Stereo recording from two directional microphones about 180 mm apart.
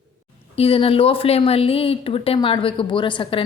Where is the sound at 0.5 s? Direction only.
30° left (ahead or behind).